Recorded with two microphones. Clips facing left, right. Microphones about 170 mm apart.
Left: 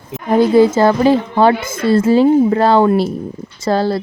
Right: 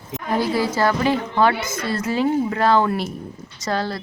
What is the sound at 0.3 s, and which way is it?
A woman's voice, 20° left (ahead or behind).